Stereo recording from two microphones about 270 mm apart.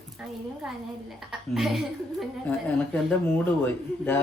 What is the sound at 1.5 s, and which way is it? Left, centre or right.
Speech, centre.